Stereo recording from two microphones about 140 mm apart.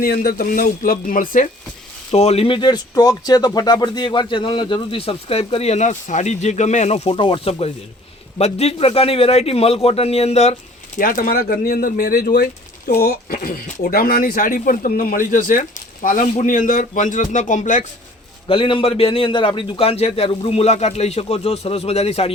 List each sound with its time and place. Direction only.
0.0 s speech: 90° left
2.1 s a man's voice: 45° left (ahead or behind)
10.9 s a man's voice: 80° left; by 17.8 s 60° left (ahead or behind)
18.4 s a man's voice: 40° left (ahead or behind)